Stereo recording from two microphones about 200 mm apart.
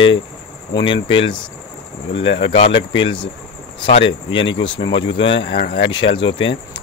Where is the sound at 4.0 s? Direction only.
70° left (ahead or behind).